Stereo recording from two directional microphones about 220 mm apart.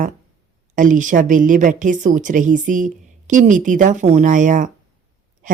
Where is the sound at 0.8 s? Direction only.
35° right (ahead or behind).